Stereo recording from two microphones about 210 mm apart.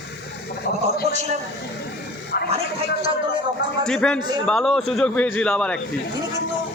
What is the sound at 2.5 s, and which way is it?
Speech, 30° right (ahead or behind).